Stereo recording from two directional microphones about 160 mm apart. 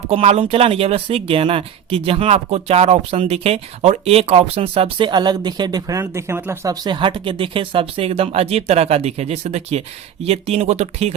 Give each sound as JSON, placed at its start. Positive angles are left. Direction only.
{"t": 0.1, "sound": "speech", "side_deg": -40}